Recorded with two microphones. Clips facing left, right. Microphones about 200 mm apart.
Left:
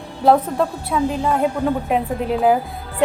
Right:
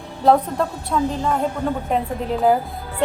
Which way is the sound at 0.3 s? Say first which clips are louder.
Left 1 dB; 5° left (ahead or behind).